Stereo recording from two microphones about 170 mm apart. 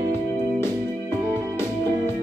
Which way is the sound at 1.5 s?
15° left (ahead or behind).